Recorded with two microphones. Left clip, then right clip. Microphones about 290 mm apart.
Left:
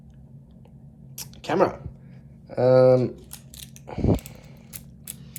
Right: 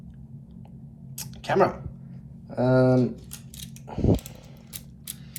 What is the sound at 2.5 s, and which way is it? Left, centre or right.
Speech, left.